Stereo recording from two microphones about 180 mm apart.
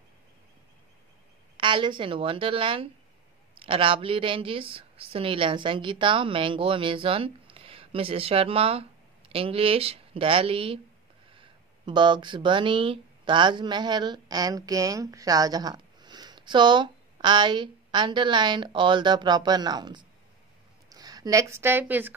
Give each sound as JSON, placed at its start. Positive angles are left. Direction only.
{"t": 1.6, "sound": "a woman's voice", "side_deg": -30}